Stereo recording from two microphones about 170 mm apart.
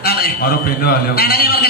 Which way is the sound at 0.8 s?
65° left (ahead or behind).